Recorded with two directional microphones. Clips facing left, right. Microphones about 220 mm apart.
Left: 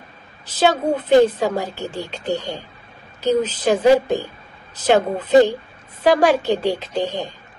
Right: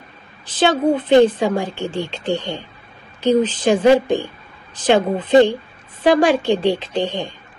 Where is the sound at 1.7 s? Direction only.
25° right (ahead or behind).